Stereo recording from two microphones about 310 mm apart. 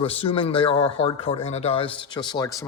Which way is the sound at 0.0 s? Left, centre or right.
Centre.